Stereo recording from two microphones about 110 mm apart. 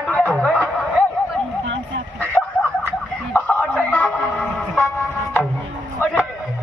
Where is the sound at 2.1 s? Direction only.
15° left (ahead or behind).